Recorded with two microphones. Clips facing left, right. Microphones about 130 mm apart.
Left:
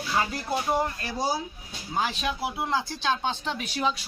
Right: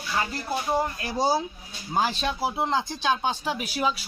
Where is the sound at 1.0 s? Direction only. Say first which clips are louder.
Right 4 dB; 20° right (ahead or behind).